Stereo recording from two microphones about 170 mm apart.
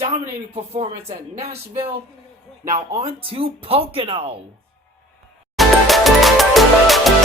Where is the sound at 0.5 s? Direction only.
40° right (ahead or behind).